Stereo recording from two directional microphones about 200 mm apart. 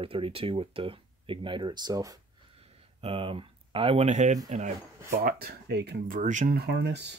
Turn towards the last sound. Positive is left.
turn(degrees=-60)  # may be behind; listen again after turning